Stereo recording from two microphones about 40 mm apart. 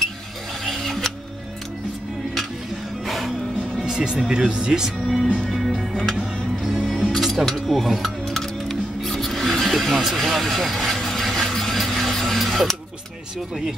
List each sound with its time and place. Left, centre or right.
0.7 s mechanisms: centre
3.1 s music: centre
3.8 s speech: centre
5.0 s music: centre
6.1 s music: centre
7.2 s music: centre
7.4 s rub: centre
12.4 s mechanisms: centre